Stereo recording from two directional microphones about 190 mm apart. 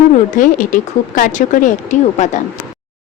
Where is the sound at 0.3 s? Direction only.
45° left (ahead or behind).